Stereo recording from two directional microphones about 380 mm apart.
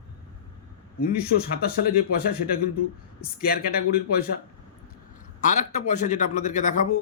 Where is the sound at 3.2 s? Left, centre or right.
Left.